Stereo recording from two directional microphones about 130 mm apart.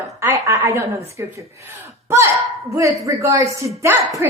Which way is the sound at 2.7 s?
25° right (ahead or behind).